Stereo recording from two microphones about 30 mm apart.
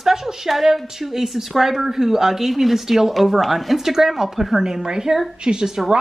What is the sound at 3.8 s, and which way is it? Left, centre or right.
Speech, centre.